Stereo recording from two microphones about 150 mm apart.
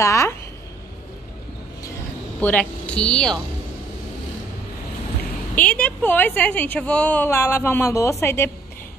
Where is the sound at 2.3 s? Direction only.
10° left (ahead or behind).